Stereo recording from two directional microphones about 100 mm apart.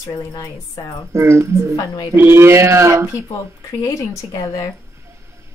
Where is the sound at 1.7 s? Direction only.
45° left (ahead or behind).